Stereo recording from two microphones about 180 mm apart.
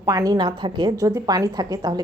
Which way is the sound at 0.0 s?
20° right (ahead or behind).